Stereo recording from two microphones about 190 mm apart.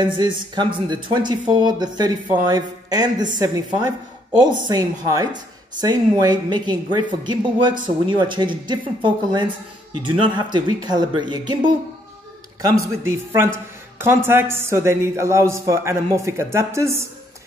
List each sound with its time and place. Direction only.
0.0 s speech: 25° right (ahead or behind)
4.4 s speech: 20° right (ahead or behind)
13.0 s speech: 15° right (ahead or behind)